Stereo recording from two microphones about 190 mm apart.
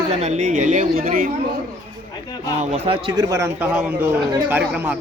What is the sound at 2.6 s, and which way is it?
Speech, 35° right (ahead or behind).